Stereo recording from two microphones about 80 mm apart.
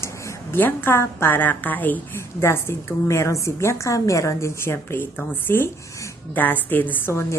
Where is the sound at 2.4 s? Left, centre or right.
Left.